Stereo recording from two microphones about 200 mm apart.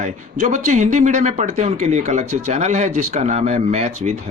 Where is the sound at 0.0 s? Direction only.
40° right (ahead or behind).